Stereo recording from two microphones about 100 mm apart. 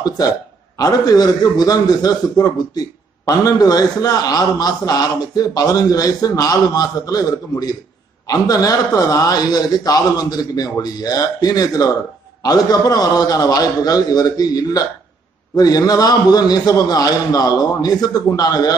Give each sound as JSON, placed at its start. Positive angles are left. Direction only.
{"t": 0.7, "sound": "a man's voice", "side_deg": 40}